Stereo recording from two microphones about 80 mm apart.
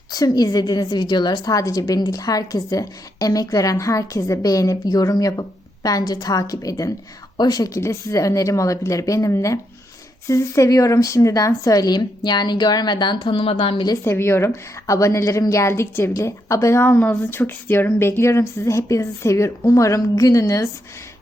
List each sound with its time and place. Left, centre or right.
0.1 s a woman's voice: left
7.8 s a woman's voice: left
14.0 s speech: left